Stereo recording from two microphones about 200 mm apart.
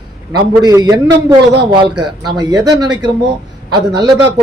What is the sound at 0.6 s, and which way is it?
A man's voice, 15° right (ahead or behind).